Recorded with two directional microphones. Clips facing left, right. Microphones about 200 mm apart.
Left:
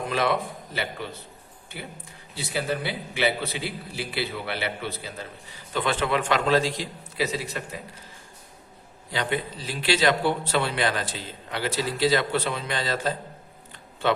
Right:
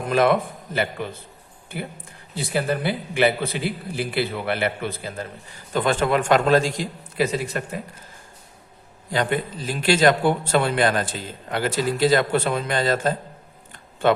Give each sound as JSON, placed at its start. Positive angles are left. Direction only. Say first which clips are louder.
{"t": 0.1, "sound": "a man's voice", "louder": "right 8 dB", "side_deg": -50}
{"t": 9.1, "sound": "a man's voice", "louder": "right 5 dB", "side_deg": -50}